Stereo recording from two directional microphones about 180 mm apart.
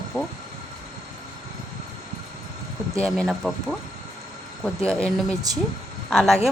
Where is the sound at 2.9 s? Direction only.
5° left (ahead or behind).